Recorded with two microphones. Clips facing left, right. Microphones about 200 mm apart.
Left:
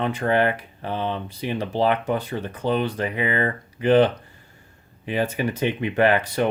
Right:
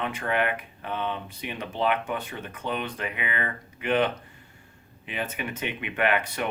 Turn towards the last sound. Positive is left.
turn(degrees=35)  # may be behind; listen again after turning